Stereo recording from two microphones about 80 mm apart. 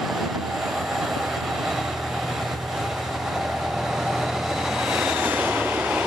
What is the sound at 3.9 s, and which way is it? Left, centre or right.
Vehicle, centre.